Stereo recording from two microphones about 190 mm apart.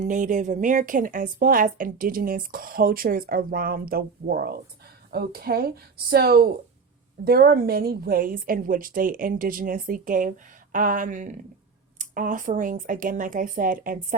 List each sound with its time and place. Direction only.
0.0 s speech: 45° right (ahead or behind)